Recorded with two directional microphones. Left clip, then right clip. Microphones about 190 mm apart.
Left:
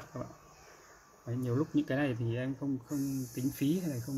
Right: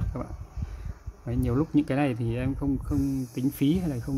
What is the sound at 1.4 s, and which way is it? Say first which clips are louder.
Speech: right 7 dB; 30° right (ahead or behind).